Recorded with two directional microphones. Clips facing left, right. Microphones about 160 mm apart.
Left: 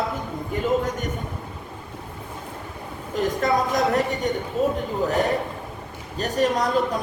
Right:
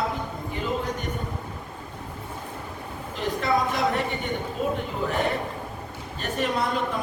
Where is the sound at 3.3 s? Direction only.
40° left (ahead or behind).